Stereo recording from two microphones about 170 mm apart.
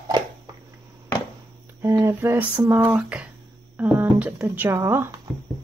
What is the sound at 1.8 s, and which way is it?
Speech, 15° right (ahead or behind).